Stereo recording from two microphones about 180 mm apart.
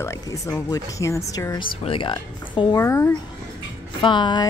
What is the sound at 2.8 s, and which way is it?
Speech, 15° left (ahead or behind).